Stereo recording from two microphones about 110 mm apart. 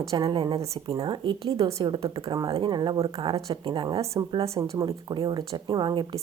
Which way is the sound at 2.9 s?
55° right (ahead or behind).